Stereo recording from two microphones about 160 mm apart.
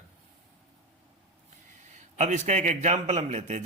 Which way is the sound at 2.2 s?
45° right (ahead or behind).